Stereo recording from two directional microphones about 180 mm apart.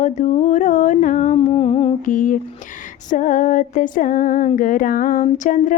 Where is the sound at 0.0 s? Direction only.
40° left (ahead or behind).